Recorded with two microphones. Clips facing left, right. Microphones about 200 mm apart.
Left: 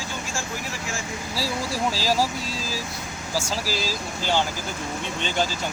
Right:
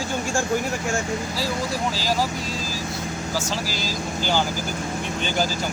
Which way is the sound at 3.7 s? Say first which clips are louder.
Left 1 dB; 35° left (ahead or behind).